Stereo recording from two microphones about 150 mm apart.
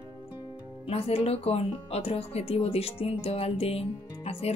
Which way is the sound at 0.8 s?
40° left (ahead or behind).